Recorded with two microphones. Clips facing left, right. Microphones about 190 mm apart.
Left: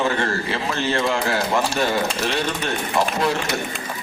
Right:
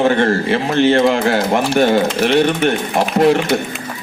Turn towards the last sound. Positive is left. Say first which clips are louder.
# right 8 dB
turn(degrees=-60)  # may be behind; listen again after turning